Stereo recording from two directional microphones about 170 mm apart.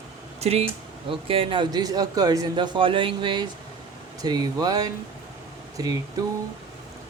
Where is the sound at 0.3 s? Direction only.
40° right (ahead or behind).